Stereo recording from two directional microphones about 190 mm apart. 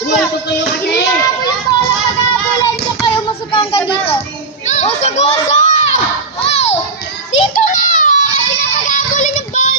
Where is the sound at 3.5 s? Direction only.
25° left (ahead or behind).